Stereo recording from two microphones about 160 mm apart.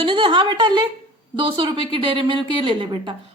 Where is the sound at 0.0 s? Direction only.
30° right (ahead or behind).